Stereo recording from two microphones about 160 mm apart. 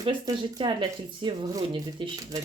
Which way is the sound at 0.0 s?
30° right (ahead or behind).